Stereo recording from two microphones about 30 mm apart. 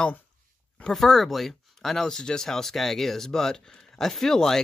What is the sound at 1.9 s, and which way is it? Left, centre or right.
Speech, left.